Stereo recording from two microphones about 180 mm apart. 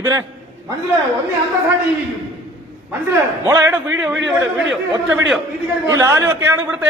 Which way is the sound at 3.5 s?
15° right (ahead or behind).